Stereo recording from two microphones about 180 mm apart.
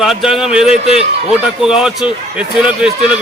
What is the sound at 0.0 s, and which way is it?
Speech, centre (ahead or behind).